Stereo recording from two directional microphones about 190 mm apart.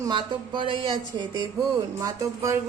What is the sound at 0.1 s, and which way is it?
Speech, 25° right (ahead or behind).